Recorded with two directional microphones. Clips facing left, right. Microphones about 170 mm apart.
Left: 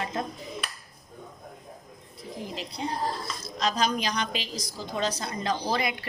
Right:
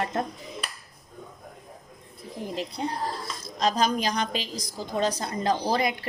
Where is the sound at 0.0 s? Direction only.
55° right (ahead or behind).